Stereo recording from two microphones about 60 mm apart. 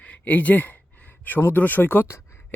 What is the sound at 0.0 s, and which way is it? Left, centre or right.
Speech, left.